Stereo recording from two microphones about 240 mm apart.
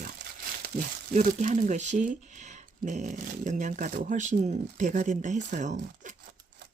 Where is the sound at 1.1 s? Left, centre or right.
Right.